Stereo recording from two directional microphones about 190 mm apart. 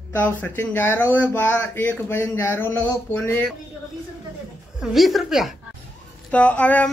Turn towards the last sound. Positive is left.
turn(degrees=5)  # may be behind; listen again after turning